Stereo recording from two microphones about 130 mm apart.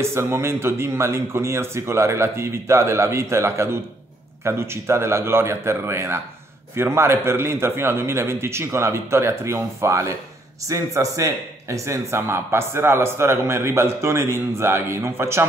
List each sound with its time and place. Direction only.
0.0 s a man's voice: 20° right (ahead or behind)